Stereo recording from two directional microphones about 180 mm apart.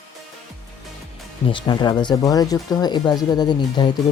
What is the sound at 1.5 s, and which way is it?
Speech, 25° left (ahead or behind).